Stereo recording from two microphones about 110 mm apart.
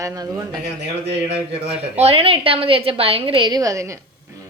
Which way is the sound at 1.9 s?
65° right (ahead or behind).